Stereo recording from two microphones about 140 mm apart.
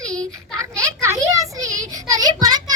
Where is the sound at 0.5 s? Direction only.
20° right (ahead or behind).